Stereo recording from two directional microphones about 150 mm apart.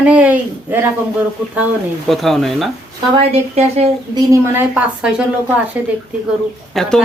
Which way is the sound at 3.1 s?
45° right (ahead or behind).